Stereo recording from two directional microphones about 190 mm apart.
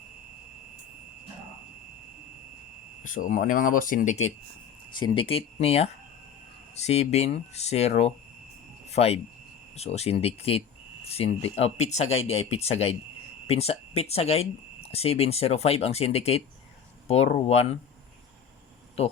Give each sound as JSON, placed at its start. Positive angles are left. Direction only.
{"t": 3.0, "sound": "speech", "side_deg": 45}
{"t": 4.9, "sound": "speech", "side_deg": 25}